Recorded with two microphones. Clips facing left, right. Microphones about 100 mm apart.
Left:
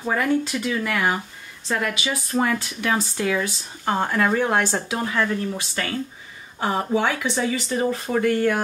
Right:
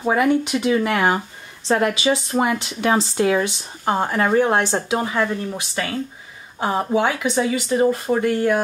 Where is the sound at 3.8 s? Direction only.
20° right (ahead or behind).